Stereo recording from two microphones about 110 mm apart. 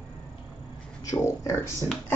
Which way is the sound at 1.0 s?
30° left (ahead or behind).